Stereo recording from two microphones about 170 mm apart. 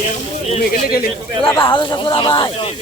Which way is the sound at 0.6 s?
65° left (ahead or behind).